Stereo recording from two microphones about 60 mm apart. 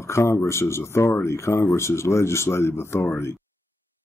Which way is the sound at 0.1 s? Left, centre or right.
Left.